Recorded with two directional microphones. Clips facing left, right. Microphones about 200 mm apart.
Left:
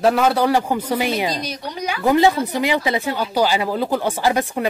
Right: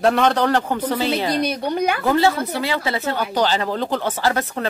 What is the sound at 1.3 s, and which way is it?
Speech, 60° right (ahead or behind).